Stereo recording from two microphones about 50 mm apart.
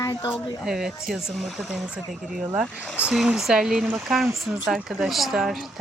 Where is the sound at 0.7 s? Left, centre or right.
Centre.